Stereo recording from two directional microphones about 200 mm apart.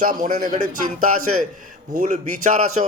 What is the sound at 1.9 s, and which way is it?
Speech, 40° right (ahead or behind).